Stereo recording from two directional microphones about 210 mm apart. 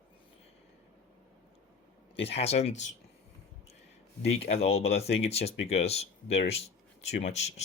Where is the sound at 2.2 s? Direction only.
30° left (ahead or behind).